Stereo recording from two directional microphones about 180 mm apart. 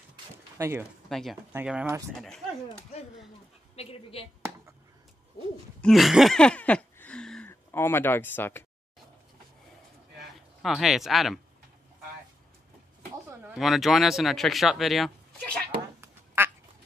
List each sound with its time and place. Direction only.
0.1 s a sound: 15° right (ahead or behind)
1.0 s speech: centre (ahead or behind)
3.7 s speech: 35° left (ahead or behind)
5.8 s a sound: centre (ahead or behind)
10.6 s speech: centre (ahead or behind)
13.3 s speech: 10° right (ahead or behind)
16.0 s quack: 10° right (ahead or behind)